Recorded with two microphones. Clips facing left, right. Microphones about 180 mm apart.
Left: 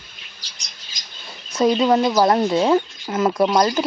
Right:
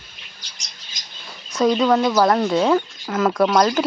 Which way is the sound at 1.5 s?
10° left (ahead or behind).